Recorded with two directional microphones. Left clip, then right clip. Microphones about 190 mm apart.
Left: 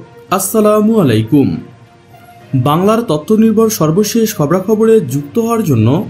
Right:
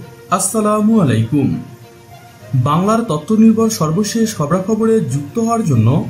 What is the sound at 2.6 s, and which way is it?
Speech, 45° left (ahead or behind).